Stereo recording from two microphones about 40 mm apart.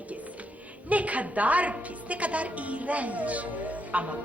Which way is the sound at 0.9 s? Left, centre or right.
Right.